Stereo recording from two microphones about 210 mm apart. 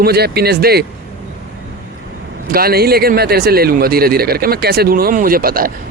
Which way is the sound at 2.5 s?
45° right (ahead or behind).